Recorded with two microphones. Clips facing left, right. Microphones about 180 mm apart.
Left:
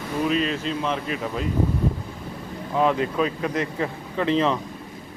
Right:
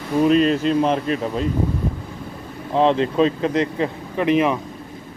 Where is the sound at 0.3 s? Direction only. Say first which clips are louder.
Right 8 dB; 45° right (ahead or behind).